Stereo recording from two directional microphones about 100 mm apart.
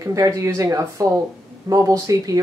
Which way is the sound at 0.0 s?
35° right (ahead or behind).